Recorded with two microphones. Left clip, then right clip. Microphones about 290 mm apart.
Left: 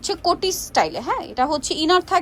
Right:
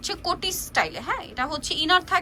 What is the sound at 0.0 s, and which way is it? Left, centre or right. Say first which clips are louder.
A woman's voice: left 6 dB; left.